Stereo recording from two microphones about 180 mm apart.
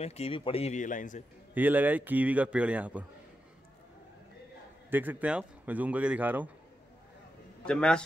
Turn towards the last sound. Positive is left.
turn(degrees=5)  # may be behind; listen again after turning